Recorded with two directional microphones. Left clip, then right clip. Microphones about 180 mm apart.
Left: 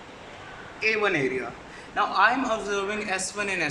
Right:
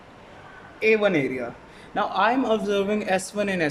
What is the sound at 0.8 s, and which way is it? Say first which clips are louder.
Speech: right 4 dB; 40° right (ahead or behind).